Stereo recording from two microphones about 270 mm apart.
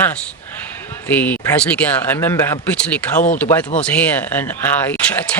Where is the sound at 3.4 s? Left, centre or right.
Centre.